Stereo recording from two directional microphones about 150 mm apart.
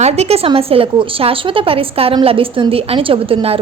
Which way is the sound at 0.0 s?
45° right (ahead or behind).